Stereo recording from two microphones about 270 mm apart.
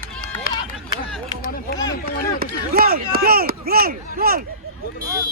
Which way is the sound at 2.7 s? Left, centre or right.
Right.